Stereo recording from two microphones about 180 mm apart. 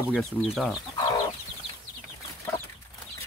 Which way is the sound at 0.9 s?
25° left (ahead or behind).